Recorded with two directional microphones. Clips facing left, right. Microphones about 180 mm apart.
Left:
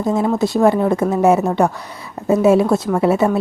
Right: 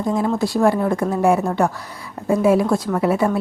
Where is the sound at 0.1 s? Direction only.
25° left (ahead or behind).